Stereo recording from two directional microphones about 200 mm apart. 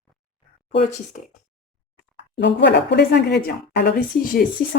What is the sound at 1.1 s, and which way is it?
Speech, 40° left (ahead or behind).